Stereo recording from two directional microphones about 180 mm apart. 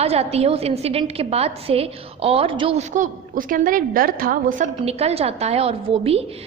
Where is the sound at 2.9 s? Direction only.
45° right (ahead or behind).